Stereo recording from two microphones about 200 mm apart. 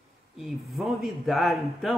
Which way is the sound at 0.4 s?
Centre (ahead or behind).